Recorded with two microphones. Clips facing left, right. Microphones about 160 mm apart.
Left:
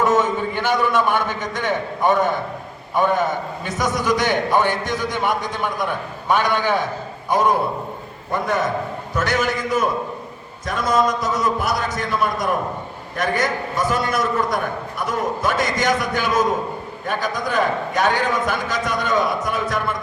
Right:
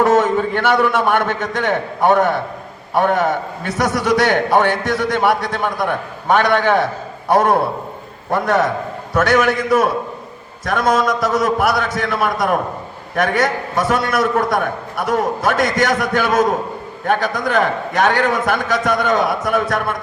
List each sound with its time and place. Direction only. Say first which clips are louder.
0.0 s a man's voice: right 4 dB; 65° right (ahead or behind)
8.3 s a man's voice: right 5 dB; 80° right
9.1 s a man's voice: right 7 dB; 70° right (ahead or behind)